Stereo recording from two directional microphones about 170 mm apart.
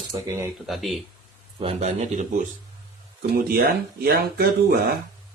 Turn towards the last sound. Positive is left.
turn(degrees=-65)  # may be behind; listen again after turning